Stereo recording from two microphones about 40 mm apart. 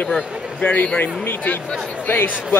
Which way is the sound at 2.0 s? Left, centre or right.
Left.